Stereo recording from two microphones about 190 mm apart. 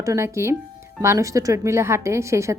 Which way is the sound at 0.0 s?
15° right (ahead or behind).